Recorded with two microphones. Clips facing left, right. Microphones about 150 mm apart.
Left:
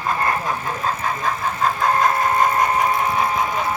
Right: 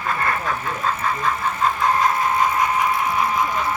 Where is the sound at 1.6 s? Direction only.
50° left (ahead or behind).